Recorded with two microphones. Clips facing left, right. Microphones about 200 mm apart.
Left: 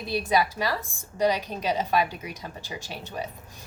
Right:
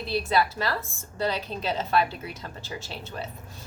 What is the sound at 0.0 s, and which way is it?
A woman's voice, 15° left (ahead or behind).